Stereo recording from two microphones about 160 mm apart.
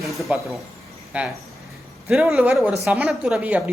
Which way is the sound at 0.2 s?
Centre (ahead or behind).